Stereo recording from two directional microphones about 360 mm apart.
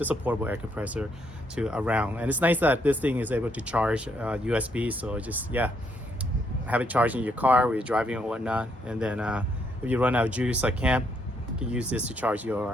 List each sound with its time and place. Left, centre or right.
0.0 s speech: centre